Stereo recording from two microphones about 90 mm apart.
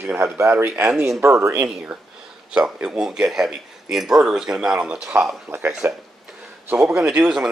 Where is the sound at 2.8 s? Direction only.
10° right (ahead or behind).